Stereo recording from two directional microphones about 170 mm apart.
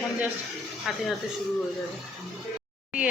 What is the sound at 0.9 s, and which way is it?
Speech, centre (ahead or behind).